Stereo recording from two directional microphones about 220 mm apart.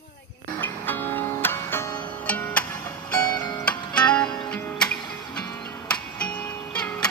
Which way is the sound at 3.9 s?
5° left (ahead or behind).